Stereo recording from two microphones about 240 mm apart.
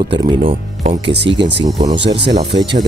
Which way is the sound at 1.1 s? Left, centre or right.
Right.